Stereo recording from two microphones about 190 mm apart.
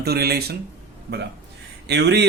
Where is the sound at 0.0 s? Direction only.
55° right (ahead or behind).